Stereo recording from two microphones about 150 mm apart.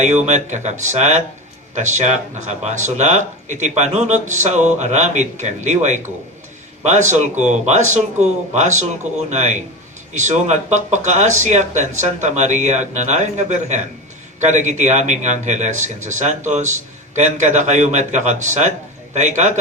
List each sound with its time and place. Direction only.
0.0 s speech: 50° right (ahead or behind)